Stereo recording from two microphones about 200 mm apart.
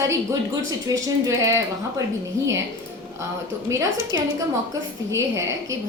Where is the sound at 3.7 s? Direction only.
15° right (ahead or behind).